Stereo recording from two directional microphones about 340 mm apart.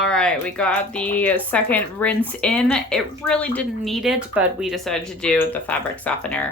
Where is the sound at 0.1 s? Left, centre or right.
Centre.